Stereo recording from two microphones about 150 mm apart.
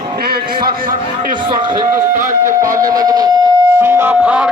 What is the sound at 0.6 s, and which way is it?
Speech, 70° right (ahead or behind).